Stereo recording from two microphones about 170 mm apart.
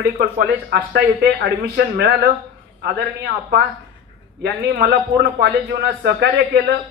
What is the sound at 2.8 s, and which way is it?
A man's voice, 70° right (ahead or behind).